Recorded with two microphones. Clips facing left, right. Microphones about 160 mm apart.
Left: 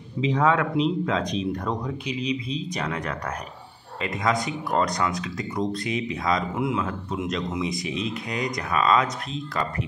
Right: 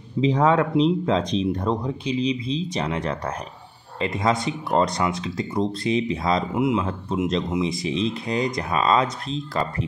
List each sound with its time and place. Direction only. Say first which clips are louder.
0.2 s speech: right 3 dB; 35° right (ahead or behind)